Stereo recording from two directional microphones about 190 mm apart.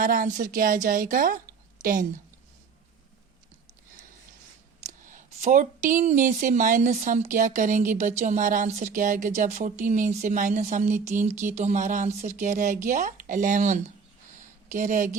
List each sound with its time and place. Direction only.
0.0 s a woman's voice: 45° right (ahead or behind)
4.9 s speech: 40° right (ahead or behind)
14.3 s a sound: 40° right (ahead or behind)